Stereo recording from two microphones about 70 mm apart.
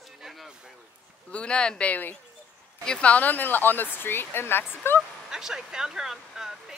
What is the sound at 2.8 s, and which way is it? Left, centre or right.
Speech, centre.